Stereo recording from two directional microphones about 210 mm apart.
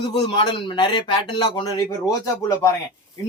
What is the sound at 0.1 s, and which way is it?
Speech, 25° left (ahead or behind).